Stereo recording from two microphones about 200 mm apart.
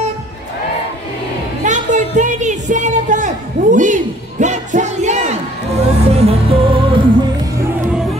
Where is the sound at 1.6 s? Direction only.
40° right (ahead or behind).